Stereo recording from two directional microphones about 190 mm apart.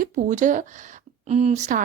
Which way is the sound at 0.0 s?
40° right (ahead or behind).